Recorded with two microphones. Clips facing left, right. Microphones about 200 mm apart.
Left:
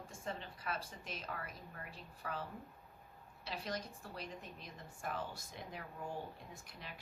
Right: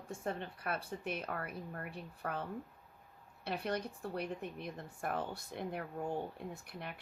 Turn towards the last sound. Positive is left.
turn(degrees=-60)  # may be behind; listen again after turning